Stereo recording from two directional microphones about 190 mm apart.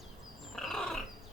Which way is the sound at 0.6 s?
Centre (ahead or behind).